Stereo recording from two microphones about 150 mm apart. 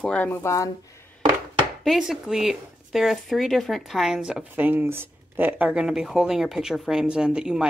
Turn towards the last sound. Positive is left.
turn(degrees=-5)  # may be behind; listen again after turning